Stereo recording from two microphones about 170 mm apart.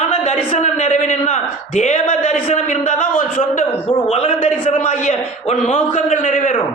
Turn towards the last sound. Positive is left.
turn(degrees=45)  # may be behind; listen again after turning